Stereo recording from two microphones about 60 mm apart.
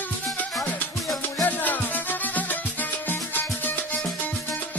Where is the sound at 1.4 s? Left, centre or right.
Left.